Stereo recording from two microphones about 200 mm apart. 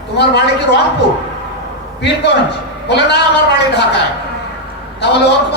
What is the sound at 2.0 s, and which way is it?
Speech, 60° left (ahead or behind).